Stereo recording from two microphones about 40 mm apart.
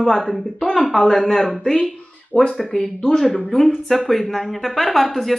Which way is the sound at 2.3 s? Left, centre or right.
Left.